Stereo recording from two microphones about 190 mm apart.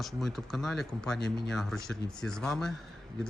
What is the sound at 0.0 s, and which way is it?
Speech, centre (ahead or behind).